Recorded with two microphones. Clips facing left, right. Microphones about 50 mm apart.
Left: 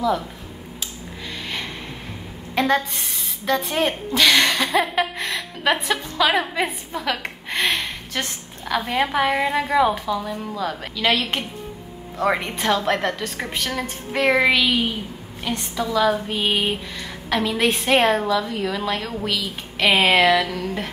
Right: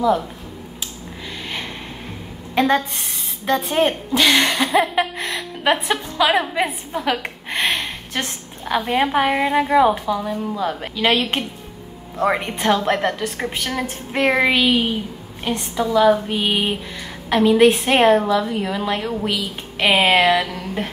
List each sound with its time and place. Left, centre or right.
2.6 s a woman's voice: right
7.5 s a sound: right
8.8 s a woman's voice: centre; by 11.4 s right
12.7 s a woman's voice: centre
16.3 s a sound: centre
17.3 s a woman's voice: centre